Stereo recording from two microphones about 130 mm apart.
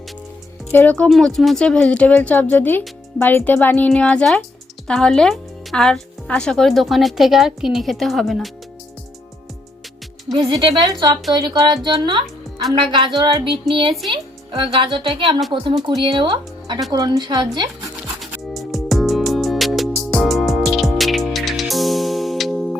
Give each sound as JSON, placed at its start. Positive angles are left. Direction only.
{"t": 0.7, "sound": "speech", "side_deg": 15}
{"t": 10.3, "sound": "speech", "side_deg": -40}
{"t": 18.2, "sound": "music", "side_deg": 0}